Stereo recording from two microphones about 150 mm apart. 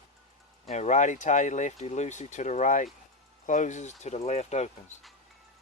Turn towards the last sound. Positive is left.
turn(degrees=50)  # may be behind; listen again after turning